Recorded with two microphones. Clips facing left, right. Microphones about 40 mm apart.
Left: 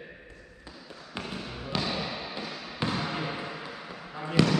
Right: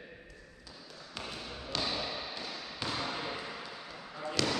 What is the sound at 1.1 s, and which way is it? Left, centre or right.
Trickle, centre.